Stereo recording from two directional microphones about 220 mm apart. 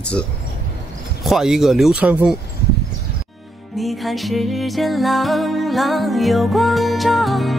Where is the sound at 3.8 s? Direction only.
Centre (ahead or behind).